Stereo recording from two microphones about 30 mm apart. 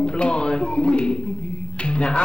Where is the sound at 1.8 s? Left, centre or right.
Left.